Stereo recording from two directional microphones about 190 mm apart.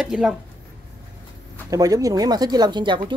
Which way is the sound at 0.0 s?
5° right (ahead or behind).